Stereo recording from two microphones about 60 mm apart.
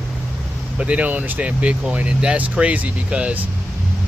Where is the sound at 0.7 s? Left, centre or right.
Right.